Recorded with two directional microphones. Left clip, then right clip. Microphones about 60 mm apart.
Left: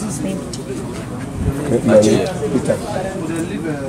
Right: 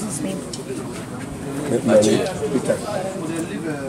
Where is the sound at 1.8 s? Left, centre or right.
Centre.